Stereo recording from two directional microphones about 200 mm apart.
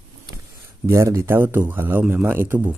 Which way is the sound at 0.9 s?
15° right (ahead or behind).